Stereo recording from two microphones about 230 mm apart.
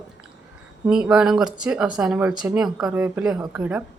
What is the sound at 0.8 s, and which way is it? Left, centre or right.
A woman's voice, centre.